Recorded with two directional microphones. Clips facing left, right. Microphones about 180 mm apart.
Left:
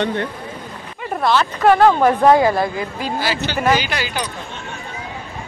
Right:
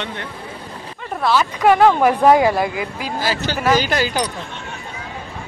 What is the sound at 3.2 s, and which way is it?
Speech, 40° right (ahead or behind).